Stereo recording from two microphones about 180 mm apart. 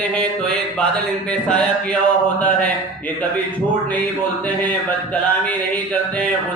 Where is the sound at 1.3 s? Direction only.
5° left (ahead or behind).